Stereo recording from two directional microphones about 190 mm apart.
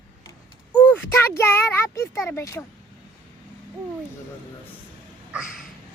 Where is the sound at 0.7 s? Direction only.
10° left (ahead or behind).